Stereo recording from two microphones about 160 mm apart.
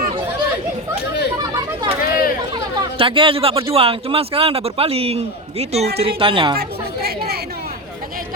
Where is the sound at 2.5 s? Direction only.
30° right (ahead or behind).